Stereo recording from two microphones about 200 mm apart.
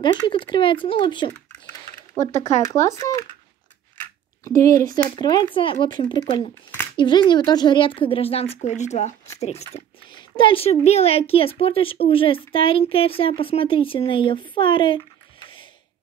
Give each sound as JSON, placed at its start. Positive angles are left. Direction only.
{"t": 0.0, "sound": "a child's voice", "side_deg": 25}
{"t": 4.5, "sound": "a child's voice", "side_deg": 15}
{"t": 9.6, "sound": "a child's voice", "side_deg": 20}